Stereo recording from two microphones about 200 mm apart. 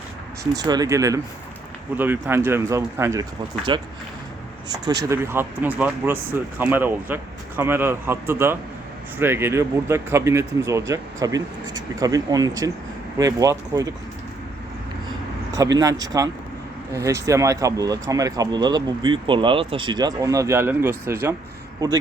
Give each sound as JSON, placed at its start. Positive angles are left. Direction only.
{"t": 0.5, "sound": "speech", "side_deg": -20}
{"t": 5.0, "sound": "speech", "side_deg": -15}
{"t": 15.8, "sound": "speech", "side_deg": -20}